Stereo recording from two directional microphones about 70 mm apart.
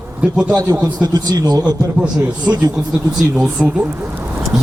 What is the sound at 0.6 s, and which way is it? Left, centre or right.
Speech, right.